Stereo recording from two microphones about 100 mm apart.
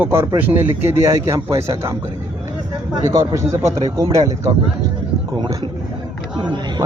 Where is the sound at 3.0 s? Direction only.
30° right (ahead or behind).